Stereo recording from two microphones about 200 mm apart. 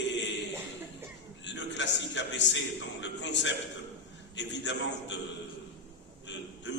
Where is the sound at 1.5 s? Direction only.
65° left (ahead or behind).